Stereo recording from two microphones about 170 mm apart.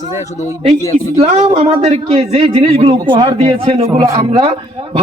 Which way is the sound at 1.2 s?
40° right (ahead or behind).